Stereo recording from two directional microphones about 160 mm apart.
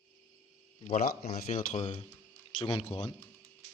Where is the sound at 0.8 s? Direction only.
55° left (ahead or behind); by 3.1 s 35° left (ahead or behind).